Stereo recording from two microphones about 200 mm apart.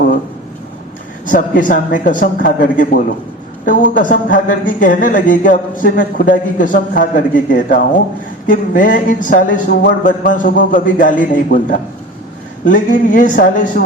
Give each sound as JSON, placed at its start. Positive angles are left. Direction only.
{"t": 1.2, "sound": "a man's voice", "side_deg": 40}